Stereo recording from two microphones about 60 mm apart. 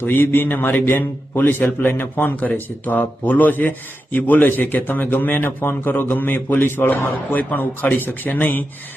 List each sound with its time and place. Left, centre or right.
0.0 s speech: left